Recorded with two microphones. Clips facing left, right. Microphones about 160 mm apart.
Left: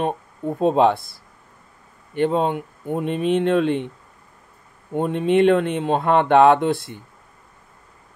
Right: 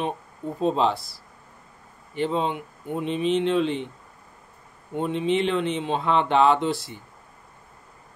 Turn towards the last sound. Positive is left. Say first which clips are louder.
# left 5 dB
turn(degrees=55)  # may be behind; listen again after turning